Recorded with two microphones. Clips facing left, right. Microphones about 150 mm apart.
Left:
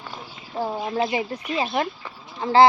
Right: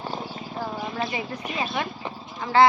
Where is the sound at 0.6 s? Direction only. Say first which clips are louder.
Left 6 dB; 30° left (ahead or behind).